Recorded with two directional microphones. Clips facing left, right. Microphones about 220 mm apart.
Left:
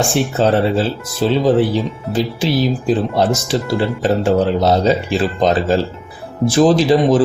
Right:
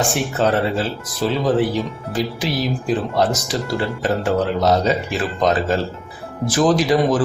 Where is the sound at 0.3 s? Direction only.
30° left (ahead or behind).